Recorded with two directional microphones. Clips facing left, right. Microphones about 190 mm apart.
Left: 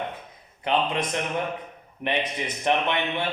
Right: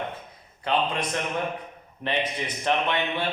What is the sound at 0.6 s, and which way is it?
Speech, 20° left (ahead or behind).